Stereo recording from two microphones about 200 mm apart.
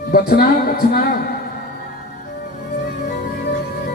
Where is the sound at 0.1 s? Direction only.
50° left (ahead or behind).